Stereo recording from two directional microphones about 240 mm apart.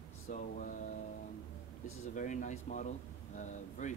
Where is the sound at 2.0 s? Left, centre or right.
Left.